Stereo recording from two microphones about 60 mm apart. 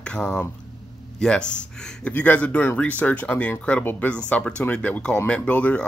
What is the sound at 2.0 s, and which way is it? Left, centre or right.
Speech, left.